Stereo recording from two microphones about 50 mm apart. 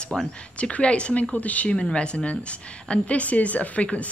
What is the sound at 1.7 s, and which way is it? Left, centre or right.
A woman's voice, centre.